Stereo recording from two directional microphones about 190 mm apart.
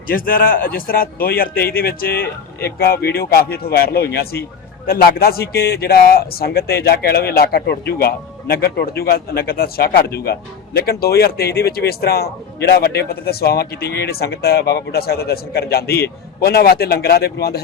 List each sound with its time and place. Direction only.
0.1 s a man's voice: 50° left (ahead or behind)